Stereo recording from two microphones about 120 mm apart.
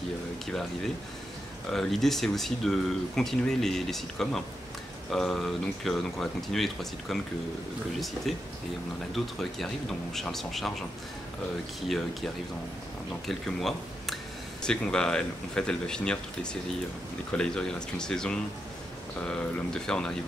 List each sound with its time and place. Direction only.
1.7 s speech: 5° left (ahead or behind)
9.1 s speech: centre (ahead or behind)
11.9 s speech: centre (ahead or behind)
13.3 s speech: centre (ahead or behind)
17.4 s speech: 5° left (ahead or behind)